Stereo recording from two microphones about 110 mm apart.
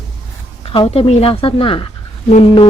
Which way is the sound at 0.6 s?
60° left (ahead or behind).